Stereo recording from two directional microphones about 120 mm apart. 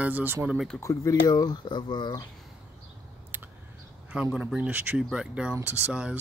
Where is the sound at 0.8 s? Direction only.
30° left (ahead or behind).